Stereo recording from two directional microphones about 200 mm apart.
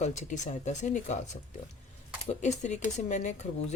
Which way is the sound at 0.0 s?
35° left (ahead or behind).